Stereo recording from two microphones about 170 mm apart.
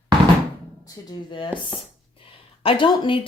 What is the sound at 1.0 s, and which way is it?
Speech, 20° left (ahead or behind).